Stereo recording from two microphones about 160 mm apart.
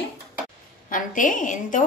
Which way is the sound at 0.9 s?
55° left (ahead or behind).